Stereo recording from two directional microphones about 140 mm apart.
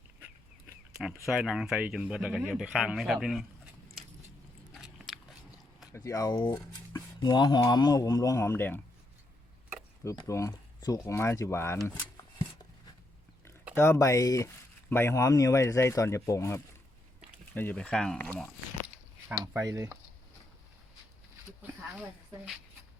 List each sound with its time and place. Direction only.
1.2 s speech: centre (ahead or behind)
4.7 s biting: centre (ahead or behind)
5.9 s speech: 25° left (ahead or behind)
10.2 s speech: 25° left (ahead or behind)
13.7 s speech: 20° left (ahead or behind)
19.5 s speech: 20° right (ahead or behind)